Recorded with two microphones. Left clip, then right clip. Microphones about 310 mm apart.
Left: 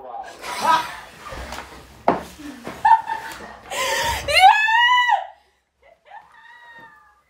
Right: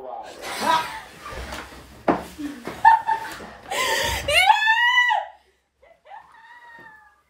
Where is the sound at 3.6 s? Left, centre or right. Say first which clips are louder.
Left 1 dB; centre.